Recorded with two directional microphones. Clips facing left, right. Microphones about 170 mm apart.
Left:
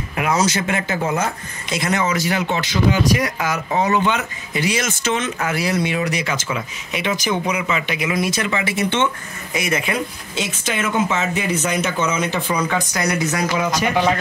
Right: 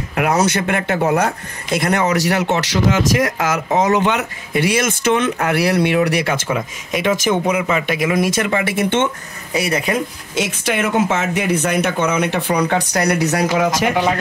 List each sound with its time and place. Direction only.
0.1 s speech: 60° right (ahead or behind)
9.5 s speech: 35° right (ahead or behind)
10.6 s speech: 60° right (ahead or behind); by 13.9 s 90° right